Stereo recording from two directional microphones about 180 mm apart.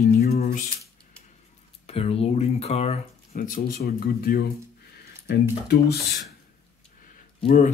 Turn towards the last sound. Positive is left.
turn(degrees=45)  # may be behind; listen again after turning